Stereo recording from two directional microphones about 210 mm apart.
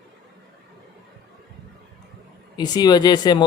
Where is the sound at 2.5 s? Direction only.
20° left (ahead or behind).